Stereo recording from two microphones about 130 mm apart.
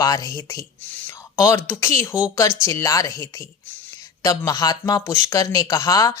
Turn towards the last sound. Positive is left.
turn(degrees=30)  # may be behind; listen again after turning